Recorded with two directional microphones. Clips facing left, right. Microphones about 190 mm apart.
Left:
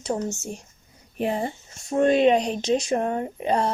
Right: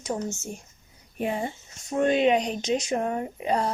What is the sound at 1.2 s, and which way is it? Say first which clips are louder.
Speech: left 3 dB; 35° left (ahead or behind).